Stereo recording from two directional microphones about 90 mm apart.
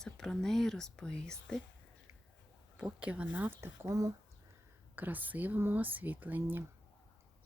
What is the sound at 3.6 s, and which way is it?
Speech, 35° right (ahead or behind).